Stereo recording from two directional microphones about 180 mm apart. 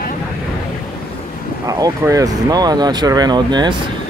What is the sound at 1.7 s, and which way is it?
Speech, 20° right (ahead or behind).